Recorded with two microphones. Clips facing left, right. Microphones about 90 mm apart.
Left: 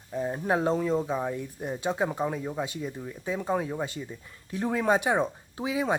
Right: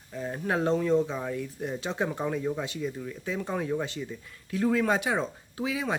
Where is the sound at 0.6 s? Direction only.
10° left (ahead or behind).